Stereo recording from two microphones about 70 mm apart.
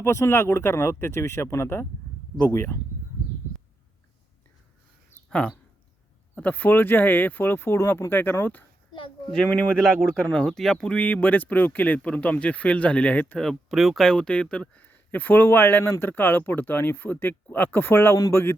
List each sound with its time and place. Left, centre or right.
0.0 s speech: left
6.3 s speech: left
9.3 s speech: centre
10.9 s speech: left
13.4 s speech: centre; by 18.5 s left